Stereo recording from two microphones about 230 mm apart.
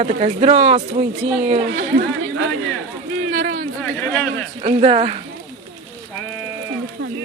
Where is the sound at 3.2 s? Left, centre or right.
Right.